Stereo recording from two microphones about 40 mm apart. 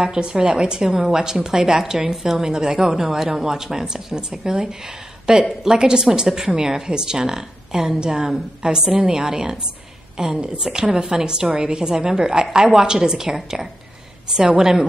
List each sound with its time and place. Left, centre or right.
0.0 s a woman's voice: right